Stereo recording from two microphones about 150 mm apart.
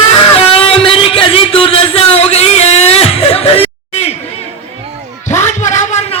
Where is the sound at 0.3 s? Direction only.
40° left (ahead or behind).